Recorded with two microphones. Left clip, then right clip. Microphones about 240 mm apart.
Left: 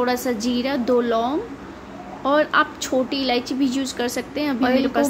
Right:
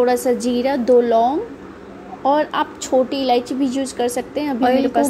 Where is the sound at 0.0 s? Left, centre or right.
Centre.